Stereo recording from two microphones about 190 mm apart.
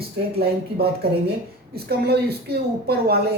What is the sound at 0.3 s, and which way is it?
Speech, 55° right (ahead or behind).